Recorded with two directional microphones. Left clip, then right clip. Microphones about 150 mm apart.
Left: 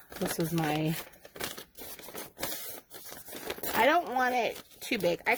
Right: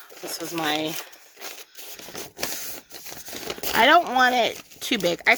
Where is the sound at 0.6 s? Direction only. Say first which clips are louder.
Right 8 dB; 30° right (ahead or behind).